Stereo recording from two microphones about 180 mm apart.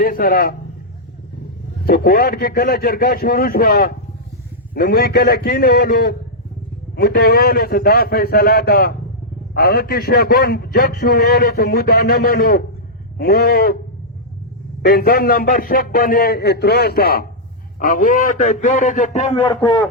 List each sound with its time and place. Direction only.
0.0 s a man's voice: 55° left (ahead or behind)
1.8 s a man's voice: 55° left (ahead or behind)
14.8 s a man's voice: 55° left (ahead or behind); by 19.5 s 40° left (ahead or behind)
19.5 s a man's voice: 20° left (ahead or behind)